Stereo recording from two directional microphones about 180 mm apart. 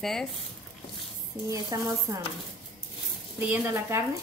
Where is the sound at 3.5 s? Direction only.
15° right (ahead or behind).